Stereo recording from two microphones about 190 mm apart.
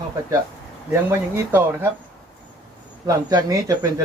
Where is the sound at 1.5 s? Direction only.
10° right (ahead or behind).